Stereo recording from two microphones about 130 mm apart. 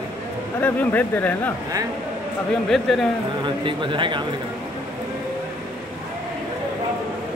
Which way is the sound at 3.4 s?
40° right (ahead or behind).